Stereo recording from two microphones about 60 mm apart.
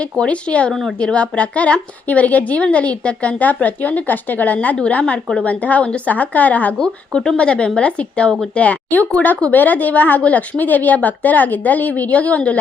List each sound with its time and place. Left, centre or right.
0.0 s a woman's voice: centre
0.7 s a woman's voice: centre
0.9 s a woman's voice: centre
6.7 s a woman's voice: centre